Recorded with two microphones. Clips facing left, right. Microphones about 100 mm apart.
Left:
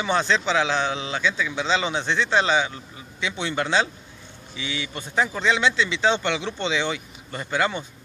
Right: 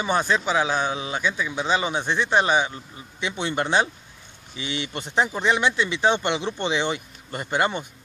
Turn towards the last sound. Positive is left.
turn(degrees=-20)  # may be behind; listen again after turning